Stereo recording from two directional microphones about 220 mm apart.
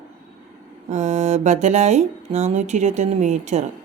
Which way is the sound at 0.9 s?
30° right (ahead or behind).